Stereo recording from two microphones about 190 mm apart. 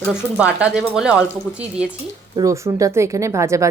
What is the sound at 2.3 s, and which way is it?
Speech, 15° right (ahead or behind).